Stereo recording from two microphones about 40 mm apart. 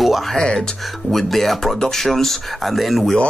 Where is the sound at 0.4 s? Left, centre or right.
Centre.